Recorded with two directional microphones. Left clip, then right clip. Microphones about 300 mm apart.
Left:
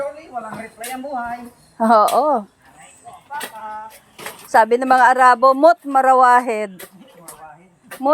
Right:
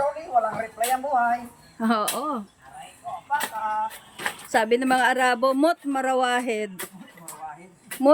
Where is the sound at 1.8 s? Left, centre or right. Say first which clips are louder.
Left 12 dB; centre.